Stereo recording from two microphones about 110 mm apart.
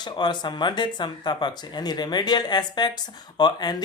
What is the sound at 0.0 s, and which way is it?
Speech, 40° left (ahead or behind).